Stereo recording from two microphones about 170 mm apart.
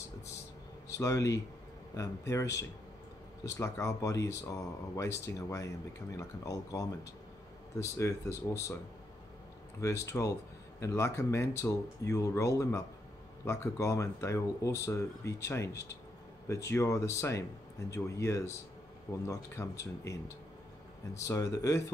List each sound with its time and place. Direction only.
0.8 s speech: 20° left (ahead or behind)
9.8 s speech: 15° left (ahead or behind)